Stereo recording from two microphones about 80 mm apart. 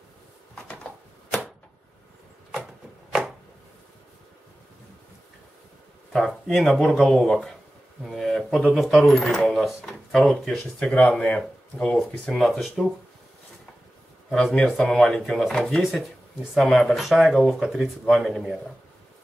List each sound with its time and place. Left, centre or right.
2.5 s chopping: centre
6.1 s speech: centre
10.6 s speech: centre
14.3 s speech: centre